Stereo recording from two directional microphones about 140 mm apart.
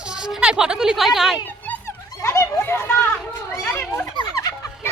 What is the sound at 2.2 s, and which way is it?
Children playing, 20° left (ahead or behind).